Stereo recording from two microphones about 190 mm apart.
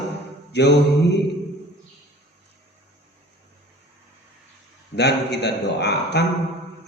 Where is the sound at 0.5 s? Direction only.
65° left (ahead or behind).